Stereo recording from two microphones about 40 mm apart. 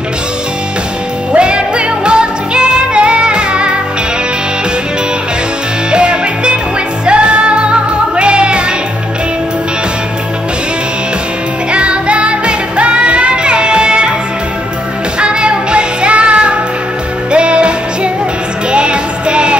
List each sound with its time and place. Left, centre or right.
1.3 s music: right
5.9 s music: right
11.7 s music: right
15.1 s music: right